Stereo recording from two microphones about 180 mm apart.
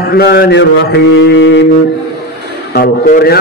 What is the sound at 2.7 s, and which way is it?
Speech, 55° left (ahead or behind).